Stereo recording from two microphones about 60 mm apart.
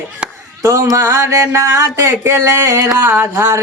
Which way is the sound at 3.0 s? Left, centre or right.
Right.